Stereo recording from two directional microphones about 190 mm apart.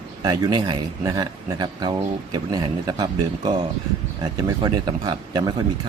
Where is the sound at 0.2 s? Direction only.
20° right (ahead or behind).